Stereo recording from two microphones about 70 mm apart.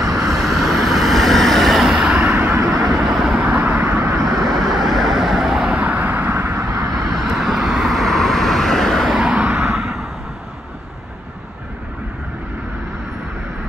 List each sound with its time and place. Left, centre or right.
0.3 s vehicle: centre
2.5 s vehicle: right
2.9 s vehicle: centre
3.3 s vehicle: centre
4.3 s vehicle: right
4.7 s vehicle: centre
5.7 s vehicle: centre
6.5 s vehicle: right
7.2 s vehicle: centre
9.2 s vehicle: centre
9.7 s vehicle: centre